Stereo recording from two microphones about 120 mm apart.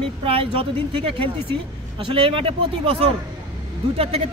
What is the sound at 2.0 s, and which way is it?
A man's voice, 45° right (ahead or behind).